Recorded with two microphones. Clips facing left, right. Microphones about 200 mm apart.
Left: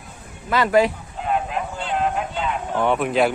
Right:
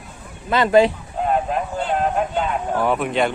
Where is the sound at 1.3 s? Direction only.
45° right (ahead or behind).